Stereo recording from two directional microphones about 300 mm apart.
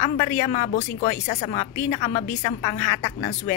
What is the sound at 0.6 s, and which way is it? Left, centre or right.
Speech, left.